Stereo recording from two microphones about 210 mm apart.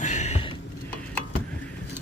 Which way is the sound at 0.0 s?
35° left (ahead or behind).